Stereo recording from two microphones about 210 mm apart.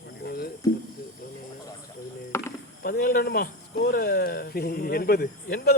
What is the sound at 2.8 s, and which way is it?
Speech, 45° left (ahead or behind).